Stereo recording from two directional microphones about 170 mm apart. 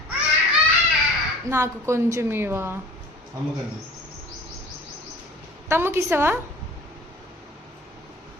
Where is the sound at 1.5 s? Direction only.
15° right (ahead or behind).